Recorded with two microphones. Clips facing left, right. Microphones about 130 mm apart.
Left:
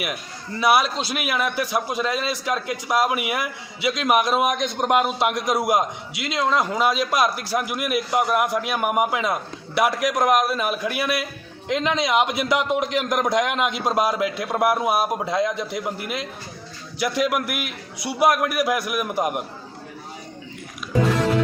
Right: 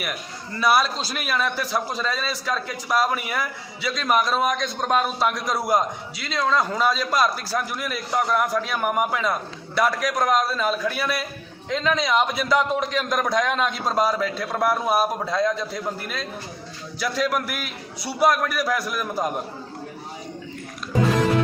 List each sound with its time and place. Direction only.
0.6 s a man's voice: 20° left (ahead or behind)